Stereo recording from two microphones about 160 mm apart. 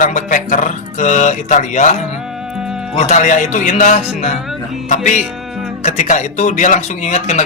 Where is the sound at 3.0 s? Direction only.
45° left (ahead or behind).